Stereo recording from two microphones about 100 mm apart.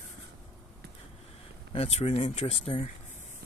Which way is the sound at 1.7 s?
85° left.